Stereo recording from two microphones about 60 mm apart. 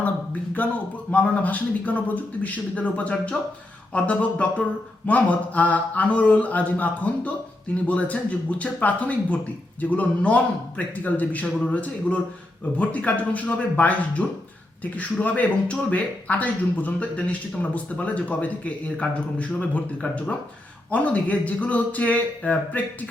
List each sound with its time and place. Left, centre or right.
0.6 s speech: left